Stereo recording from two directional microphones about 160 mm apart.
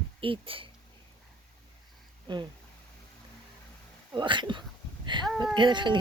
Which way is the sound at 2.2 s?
30° right (ahead or behind).